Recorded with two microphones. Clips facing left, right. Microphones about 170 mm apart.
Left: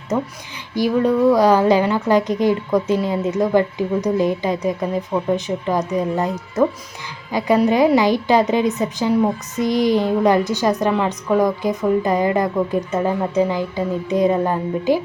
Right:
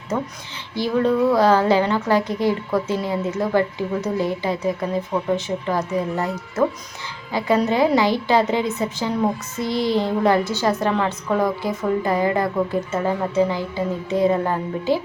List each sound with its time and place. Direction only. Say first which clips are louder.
0.7 s a woman's voice: left 2 dB; 15° left (ahead or behind)